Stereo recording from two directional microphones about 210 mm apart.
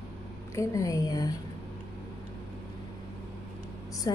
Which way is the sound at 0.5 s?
15° left (ahead or behind).